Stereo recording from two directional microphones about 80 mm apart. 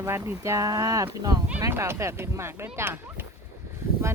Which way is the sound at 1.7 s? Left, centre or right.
Right.